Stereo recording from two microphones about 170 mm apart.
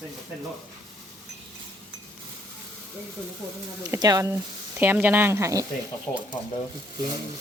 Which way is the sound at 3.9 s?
20° right (ahead or behind).